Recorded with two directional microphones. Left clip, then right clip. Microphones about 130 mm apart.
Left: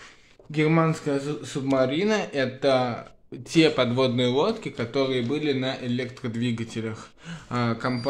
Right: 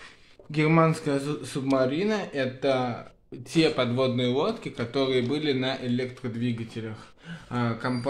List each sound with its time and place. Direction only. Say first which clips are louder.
0.5 s speech: even; 5° right (ahead or behind)
1.4 s speech: left 2 dB; 5° left (ahead or behind)
6.2 s speech: left 2 dB; 50° left (ahead or behind)